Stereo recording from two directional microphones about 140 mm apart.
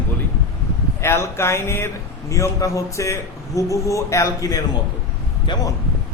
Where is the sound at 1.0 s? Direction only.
20° left (ahead or behind); by 5.6 s 35° left (ahead or behind).